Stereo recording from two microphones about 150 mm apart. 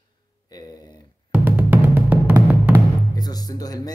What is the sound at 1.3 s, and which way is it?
Music, 10° right (ahead or behind).